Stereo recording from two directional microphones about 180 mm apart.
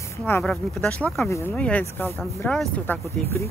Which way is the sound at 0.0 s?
15° left (ahead or behind).